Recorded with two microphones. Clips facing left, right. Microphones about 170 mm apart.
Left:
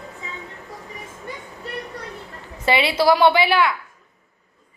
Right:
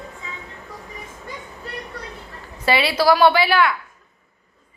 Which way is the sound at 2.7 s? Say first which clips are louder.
Even; 20° left (ahead or behind).